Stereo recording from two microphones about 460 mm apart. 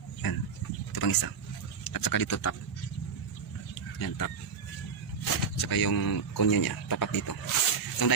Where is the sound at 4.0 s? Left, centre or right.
Left.